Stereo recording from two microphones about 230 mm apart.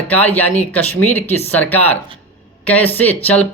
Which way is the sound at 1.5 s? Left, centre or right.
Centre.